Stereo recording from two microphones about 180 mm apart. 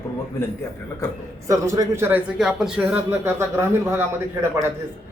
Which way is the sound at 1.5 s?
15° right (ahead or behind).